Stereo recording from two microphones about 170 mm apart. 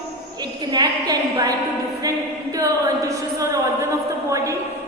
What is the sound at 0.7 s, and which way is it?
Speech, 25° right (ahead or behind).